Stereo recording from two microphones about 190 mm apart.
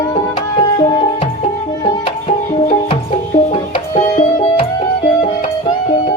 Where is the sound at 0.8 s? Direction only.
25° left (ahead or behind).